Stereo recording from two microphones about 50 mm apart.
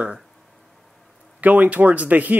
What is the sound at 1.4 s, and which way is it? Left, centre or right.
Speech, right.